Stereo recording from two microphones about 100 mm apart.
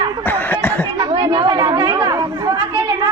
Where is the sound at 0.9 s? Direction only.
55° right (ahead or behind).